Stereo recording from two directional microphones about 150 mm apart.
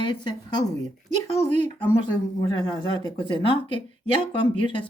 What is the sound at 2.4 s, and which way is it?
Speech, 30° left (ahead or behind).